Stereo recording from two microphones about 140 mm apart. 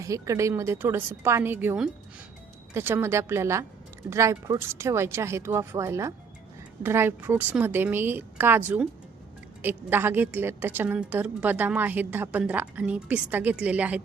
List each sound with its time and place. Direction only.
0.0 s a woman's voice: 20° right (ahead or behind)